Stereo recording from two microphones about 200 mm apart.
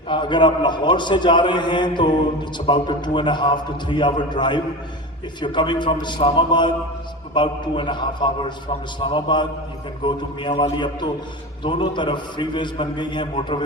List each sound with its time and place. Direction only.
0.1 s a man's voice: 25° left (ahead or behind)